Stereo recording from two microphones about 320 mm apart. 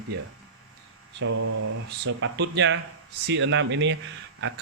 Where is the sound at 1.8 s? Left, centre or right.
Right.